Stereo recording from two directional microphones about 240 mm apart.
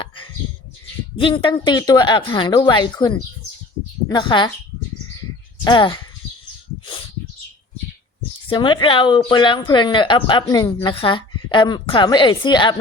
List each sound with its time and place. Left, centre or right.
1.2 s speech: left
5.6 s speech: centre
8.4 s speech: centre